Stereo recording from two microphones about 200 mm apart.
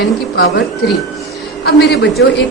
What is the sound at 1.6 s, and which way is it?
Speech, 55° left (ahead or behind).